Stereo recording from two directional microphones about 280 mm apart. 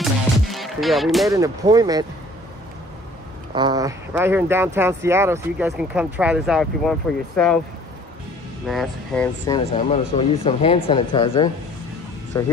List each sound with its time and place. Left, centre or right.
0.0 s music: centre
1.3 s speech: centre
3.5 s speech: centre
8.6 s speech: centre
9.5 s speech: centre